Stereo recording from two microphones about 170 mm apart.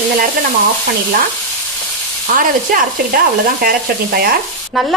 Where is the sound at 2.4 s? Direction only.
55° right (ahead or behind).